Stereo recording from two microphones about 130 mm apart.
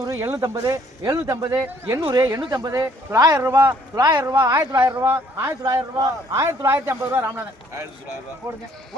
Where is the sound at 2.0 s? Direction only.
30° right (ahead or behind).